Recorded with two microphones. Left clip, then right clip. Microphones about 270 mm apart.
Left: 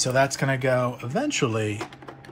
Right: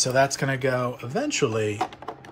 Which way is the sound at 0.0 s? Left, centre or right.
Centre.